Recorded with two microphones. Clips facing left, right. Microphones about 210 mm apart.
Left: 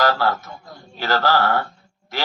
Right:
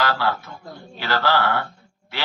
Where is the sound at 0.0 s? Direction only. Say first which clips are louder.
Left 3 dB; 40° left (ahead or behind).